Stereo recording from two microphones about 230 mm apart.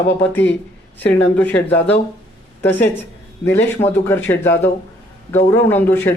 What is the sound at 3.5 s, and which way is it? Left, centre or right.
Speech, centre.